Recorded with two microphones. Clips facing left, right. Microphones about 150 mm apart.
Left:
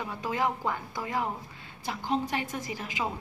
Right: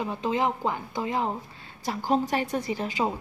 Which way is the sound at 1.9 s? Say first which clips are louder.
Right 5 dB; 40° right (ahead or behind).